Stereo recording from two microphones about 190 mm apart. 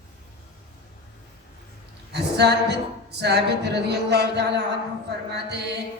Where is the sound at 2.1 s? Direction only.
60° right (ahead or behind).